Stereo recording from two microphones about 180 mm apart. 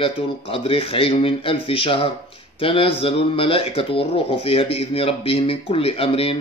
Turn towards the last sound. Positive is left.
turn(degrees=30)  # may be behind; listen again after turning